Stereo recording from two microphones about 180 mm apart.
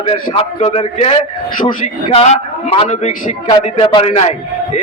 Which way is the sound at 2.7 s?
35° left (ahead or behind).